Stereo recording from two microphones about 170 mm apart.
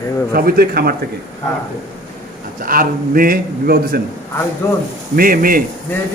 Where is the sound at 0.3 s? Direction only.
60° right (ahead or behind).